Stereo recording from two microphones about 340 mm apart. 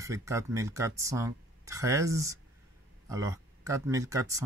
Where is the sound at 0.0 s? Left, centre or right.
Centre.